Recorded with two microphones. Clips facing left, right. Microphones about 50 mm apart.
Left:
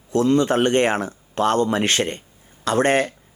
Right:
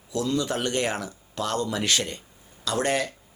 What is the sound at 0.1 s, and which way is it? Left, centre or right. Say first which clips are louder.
Speech: left 9 dB; left.